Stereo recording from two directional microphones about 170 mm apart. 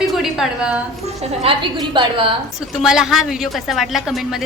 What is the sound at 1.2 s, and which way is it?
A woman's voice, 30° right (ahead or behind).